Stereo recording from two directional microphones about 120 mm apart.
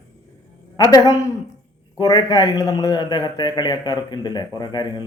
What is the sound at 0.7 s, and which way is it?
A man's voice, 30° left (ahead or behind).